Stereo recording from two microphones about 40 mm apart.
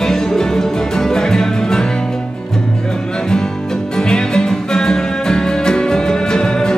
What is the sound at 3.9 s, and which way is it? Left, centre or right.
Music, centre.